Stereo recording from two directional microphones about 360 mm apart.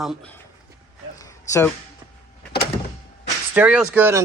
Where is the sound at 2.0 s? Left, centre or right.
Centre.